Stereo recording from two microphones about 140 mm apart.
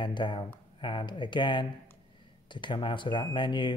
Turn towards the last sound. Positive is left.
turn(degrees=35)  # may be behind; listen again after turning